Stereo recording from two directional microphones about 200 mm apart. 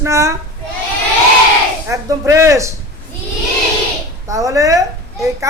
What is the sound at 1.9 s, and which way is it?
Speech, 15° right (ahead or behind).